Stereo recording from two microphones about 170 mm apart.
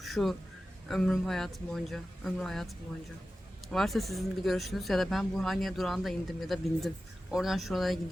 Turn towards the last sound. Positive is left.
turn(degrees=0)  # may be behind; listen again after turning